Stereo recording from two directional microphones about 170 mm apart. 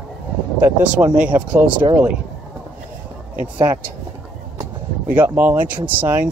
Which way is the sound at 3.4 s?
10° right (ahead or behind).